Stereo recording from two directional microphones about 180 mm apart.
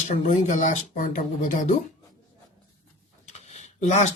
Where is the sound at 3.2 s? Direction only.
40° left (ahead or behind).